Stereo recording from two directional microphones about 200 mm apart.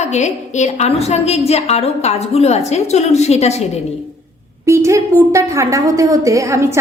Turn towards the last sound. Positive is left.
turn(degrees=-15)  # may be behind; listen again after turning